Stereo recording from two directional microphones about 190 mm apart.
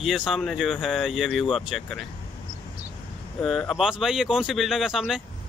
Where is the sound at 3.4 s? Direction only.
Centre (ahead or behind).